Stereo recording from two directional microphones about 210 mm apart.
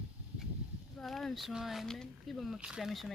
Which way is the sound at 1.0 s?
Centre (ahead or behind).